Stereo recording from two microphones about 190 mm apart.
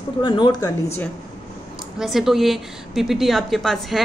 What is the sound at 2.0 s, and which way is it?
A woman's voice, centre (ahead or behind).